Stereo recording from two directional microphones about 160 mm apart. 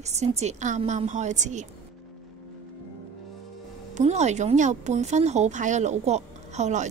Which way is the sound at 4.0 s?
45° right (ahead or behind).